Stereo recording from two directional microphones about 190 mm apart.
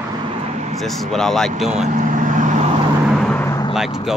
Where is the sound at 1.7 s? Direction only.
40° right (ahead or behind).